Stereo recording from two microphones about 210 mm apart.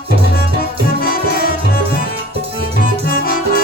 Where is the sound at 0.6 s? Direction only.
45° left (ahead or behind).